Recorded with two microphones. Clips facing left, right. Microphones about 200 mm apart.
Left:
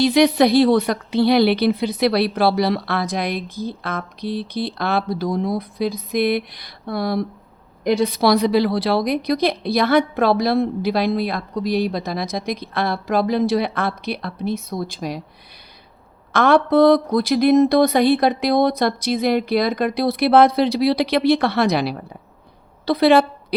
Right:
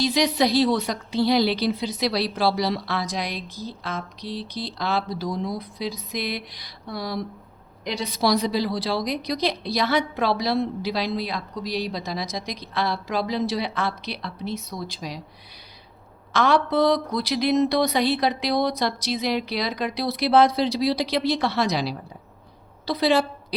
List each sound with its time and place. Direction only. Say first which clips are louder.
0.0 s a woman's voice: left 7 dB; 60° left (ahead or behind)
16.3 s a woman's voice: left 6 dB; 55° left (ahead or behind)